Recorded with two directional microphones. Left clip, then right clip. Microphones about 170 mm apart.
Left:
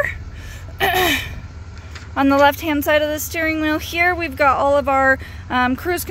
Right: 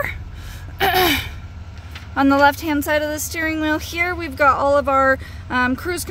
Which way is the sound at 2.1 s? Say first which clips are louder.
Even; 15° right (ahead or behind).